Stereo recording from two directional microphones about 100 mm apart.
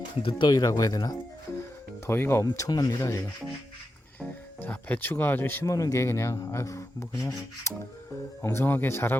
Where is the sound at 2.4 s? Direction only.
35° left (ahead or behind).